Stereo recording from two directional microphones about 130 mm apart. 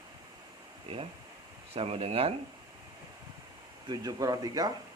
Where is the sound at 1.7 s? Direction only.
50° right (ahead or behind).